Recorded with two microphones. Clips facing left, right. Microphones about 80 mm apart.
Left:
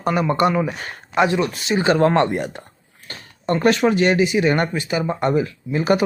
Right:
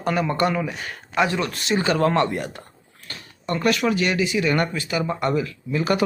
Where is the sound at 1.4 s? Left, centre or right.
Centre.